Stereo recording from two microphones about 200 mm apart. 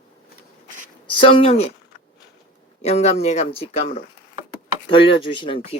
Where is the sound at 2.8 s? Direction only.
30° left (ahead or behind).